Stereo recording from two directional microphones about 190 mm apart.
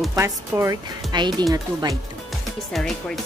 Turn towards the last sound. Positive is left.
turn(degrees=0)  # may be behind; listen again after turning